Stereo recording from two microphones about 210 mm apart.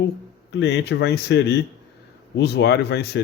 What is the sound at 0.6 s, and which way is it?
Speech, 50° left (ahead or behind).